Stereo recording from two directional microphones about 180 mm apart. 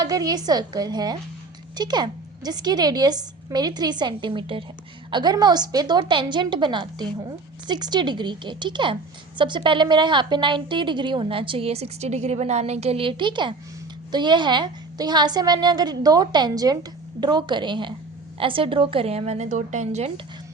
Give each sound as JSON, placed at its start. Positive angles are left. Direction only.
{"t": 0.0, "sound": "a woman's voice", "side_deg": -20}